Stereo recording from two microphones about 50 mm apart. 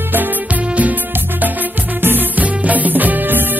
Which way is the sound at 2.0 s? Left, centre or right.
Right.